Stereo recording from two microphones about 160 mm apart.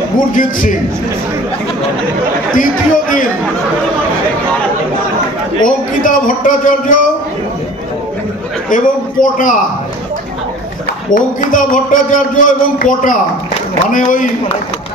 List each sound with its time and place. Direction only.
0.3 s speech: 55° left (ahead or behind)
2.5 s speech: 55° left (ahead or behind)
5.7 s speech: 55° left (ahead or behind)
8.6 s a man's voice: 55° left (ahead or behind)
11.1 s speech: 55° left (ahead or behind)